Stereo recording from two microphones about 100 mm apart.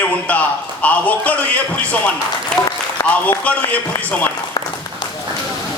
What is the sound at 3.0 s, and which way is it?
Speech, 35° left (ahead or behind).